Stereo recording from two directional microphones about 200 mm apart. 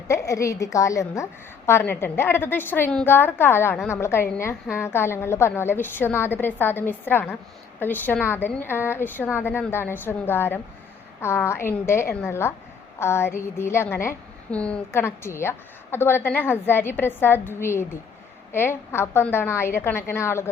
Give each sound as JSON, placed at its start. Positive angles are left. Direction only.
{"t": 0.1, "sound": "a woman's voice", "side_deg": 15}